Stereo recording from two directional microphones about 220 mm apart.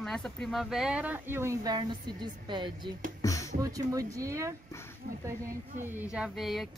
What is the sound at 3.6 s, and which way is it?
Speech, 15° right (ahead or behind).